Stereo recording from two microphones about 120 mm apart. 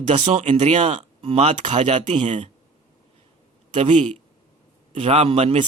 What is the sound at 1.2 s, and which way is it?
Speech, 60° right (ahead or behind).